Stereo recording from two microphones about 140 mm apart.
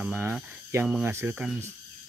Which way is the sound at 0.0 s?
15° right (ahead or behind).